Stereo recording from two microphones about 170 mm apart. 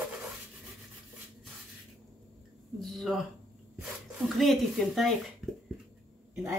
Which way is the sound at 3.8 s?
Centre (ahead or behind).